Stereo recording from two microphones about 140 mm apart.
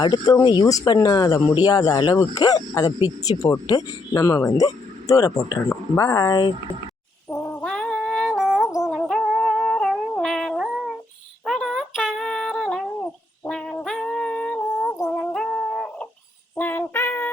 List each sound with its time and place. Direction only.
0.0 s speech: 30° left (ahead or behind)
7.3 s a sound: 20° left (ahead or behind)
7.6 s a sound: 5° left (ahead or behind)
8.8 s music: centre (ahead or behind)
11.4 s humming: 5° left (ahead or behind)
13.4 s music: 5° left (ahead or behind)
15.2 s music: 5° left (ahead or behind)
16.6 s female singing: 15° left (ahead or behind)